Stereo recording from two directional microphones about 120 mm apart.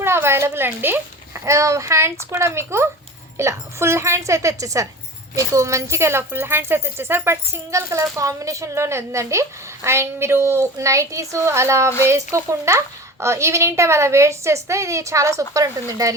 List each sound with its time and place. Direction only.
0.0 s speech: 20° right (ahead or behind)